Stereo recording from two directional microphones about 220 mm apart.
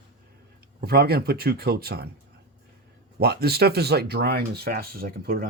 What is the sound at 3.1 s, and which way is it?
Speech, 45° right (ahead or behind).